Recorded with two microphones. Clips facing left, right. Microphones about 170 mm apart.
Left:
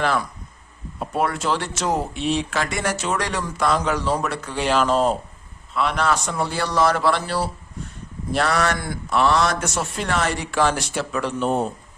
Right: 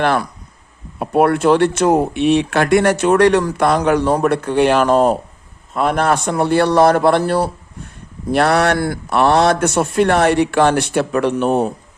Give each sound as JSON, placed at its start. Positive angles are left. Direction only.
{"t": 0.0, "sound": "speech", "side_deg": -65}